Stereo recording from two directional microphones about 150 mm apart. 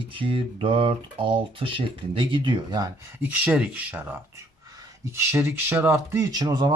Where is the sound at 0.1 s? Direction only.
35° right (ahead or behind).